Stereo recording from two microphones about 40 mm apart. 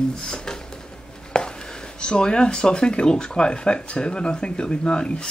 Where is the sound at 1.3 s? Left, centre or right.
Left.